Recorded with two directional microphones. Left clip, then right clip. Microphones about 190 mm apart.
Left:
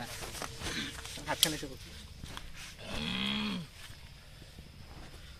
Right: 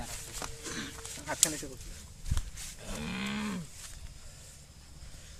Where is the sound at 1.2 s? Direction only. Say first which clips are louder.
Left 1 dB; 25° left (ahead or behind).